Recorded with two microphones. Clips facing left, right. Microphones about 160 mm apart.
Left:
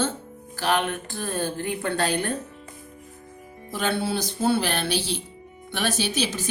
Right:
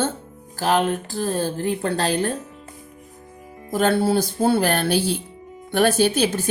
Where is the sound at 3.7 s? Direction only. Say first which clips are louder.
Right 7 dB; 45° right (ahead or behind).